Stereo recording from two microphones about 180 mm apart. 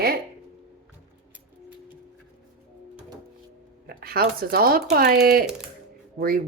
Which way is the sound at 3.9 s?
55° right (ahead or behind).